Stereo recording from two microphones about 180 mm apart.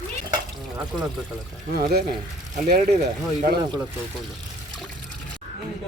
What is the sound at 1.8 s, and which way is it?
Speech, 60° right (ahead or behind).